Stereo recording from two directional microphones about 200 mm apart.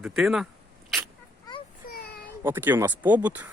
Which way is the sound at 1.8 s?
50° left (ahead or behind).